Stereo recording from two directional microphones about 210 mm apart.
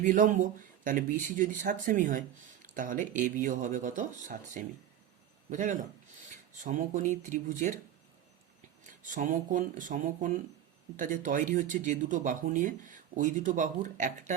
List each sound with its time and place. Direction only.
0.0 s a man's voice: 35° right (ahead or behind)
9.0 s speech: 40° right (ahead or behind)